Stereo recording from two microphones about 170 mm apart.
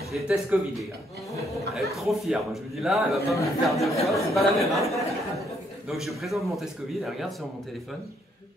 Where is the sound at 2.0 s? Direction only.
Centre (ahead or behind).